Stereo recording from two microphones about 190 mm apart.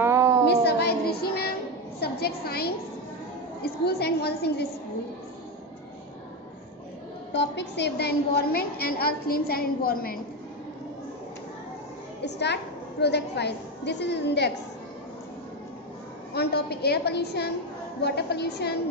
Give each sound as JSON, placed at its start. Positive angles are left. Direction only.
{"t": 0.0, "sound": "a sound", "side_deg": -15}
{"t": 0.5, "sound": "a sound", "side_deg": 60}
{"t": 2.0, "sound": "a woman's voice", "side_deg": 55}
{"t": 7.3, "sound": "a woman's voice", "side_deg": 65}
{"t": 12.3, "sound": "a woman's voice", "side_deg": 65}
{"t": 16.3, "sound": "a woman's voice", "side_deg": 60}